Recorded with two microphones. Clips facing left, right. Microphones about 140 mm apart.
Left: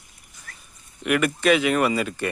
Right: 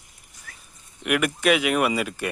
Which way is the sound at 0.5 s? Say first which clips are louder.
Left 1 dB; 10° right (ahead or behind).